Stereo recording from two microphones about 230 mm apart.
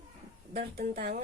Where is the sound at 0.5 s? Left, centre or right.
Right.